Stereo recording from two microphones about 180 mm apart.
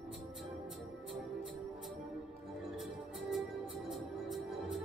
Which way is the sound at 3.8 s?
Centre (ahead or behind).